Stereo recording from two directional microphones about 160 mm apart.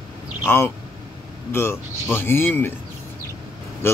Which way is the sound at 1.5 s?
15° left (ahead or behind).